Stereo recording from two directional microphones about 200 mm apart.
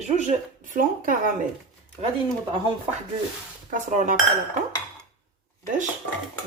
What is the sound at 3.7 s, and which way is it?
Speech, 40° right (ahead or behind).